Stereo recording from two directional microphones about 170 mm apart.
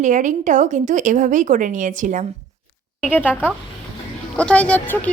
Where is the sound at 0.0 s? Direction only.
45° right (ahead or behind).